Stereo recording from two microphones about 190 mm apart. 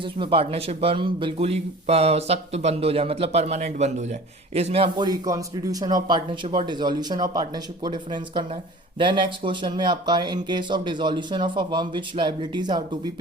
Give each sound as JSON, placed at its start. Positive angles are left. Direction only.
{"t": 0.0, "sound": "a man's voice", "side_deg": -30}